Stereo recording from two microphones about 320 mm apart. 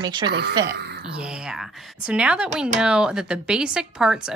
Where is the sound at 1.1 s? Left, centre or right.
Centre.